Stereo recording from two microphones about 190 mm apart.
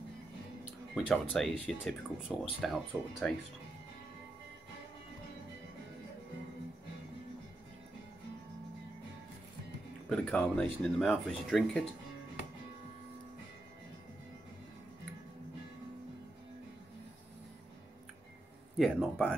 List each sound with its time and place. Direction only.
0.9 s speech: centre (ahead or behind)
10.0 s speech: 5° left (ahead or behind)
18.8 s speech: centre (ahead or behind)